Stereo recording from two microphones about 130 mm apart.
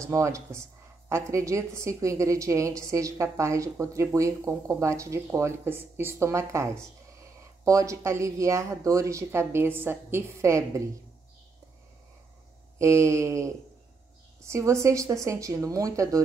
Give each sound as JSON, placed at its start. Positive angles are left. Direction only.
{"t": 0.0, "sound": "a woman's voice", "side_deg": -25}
{"t": 12.7, "sound": "a woman's voice", "side_deg": -25}